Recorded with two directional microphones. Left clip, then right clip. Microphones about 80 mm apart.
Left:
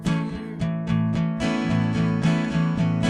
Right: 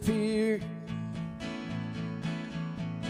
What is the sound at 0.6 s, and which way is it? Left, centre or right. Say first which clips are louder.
Music: left 14 dB; left.